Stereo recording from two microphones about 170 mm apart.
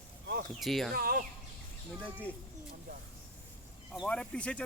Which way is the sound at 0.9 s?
60° right (ahead or behind).